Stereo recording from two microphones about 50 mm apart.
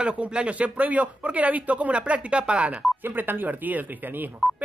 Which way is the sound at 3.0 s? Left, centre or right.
Right.